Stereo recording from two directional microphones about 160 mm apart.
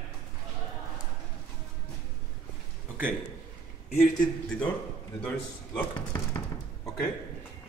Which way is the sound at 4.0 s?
5° left (ahead or behind).